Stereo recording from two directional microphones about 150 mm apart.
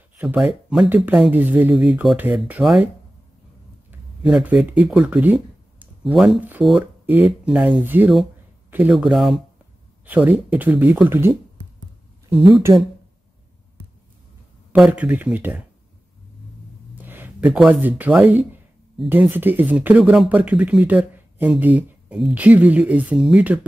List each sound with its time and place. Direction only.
0.2 s speech: 10° right (ahead or behind)
4.2 s speech: 10° right (ahead or behind)
8.6 s a sound: 10° right (ahead or behind)
8.9 s speech: centre (ahead or behind)
14.7 s speech: 10° right (ahead or behind)
17.0 s speech: 15° right (ahead or behind)